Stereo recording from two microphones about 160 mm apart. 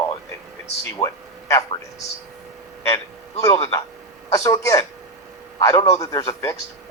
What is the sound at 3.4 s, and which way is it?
A man's voice, 20° left (ahead or behind).